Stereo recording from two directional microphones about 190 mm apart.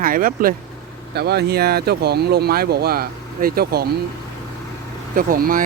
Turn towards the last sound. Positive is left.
turn(degrees=-45)  # may be behind; listen again after turning